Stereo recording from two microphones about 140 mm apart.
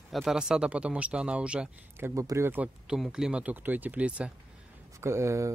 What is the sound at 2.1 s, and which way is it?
Speech, 20° right (ahead or behind).